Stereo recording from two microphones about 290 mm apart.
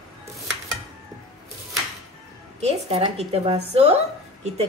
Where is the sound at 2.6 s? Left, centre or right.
Right.